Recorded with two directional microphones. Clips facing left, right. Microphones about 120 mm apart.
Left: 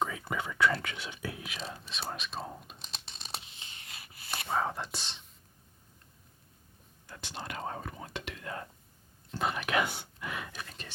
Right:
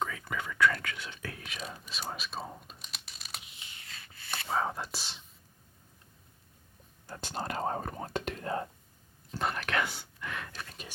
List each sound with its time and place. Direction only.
0.0 s whispering: 20° left (ahead or behind); by 1.8 s centre (ahead or behind)
1.9 s speech: centre (ahead or behind)
2.7 s tearing: 30° left (ahead or behind)
4.4 s speech: centre (ahead or behind)
7.1 s whispering: 45° right (ahead or behind)
9.3 s whispering: centre (ahead or behind)
9.6 s whispering: 15° left (ahead or behind)
10.0 s a sound: 15° left (ahead or behind)